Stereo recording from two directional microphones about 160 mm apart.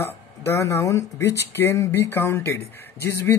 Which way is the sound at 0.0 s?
15° left (ahead or behind).